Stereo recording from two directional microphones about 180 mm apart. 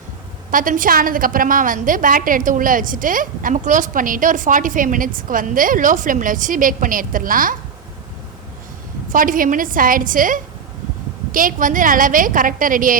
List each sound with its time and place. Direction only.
0.5 s a woman's voice: 50° right (ahead or behind)
9.1 s a woman's voice: 50° right (ahead or behind)